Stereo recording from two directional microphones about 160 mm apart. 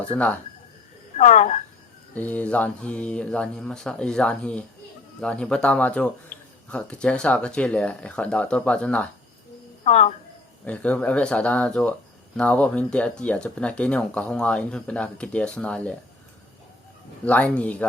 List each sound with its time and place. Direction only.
1.1 s a woman's voice: 50° left (ahead or behind)
2.1 s speech: 10° left (ahead or behind)
9.8 s speech: 45° left (ahead or behind)
10.7 s speech: 10° left (ahead or behind)
17.2 s speech: 10° left (ahead or behind)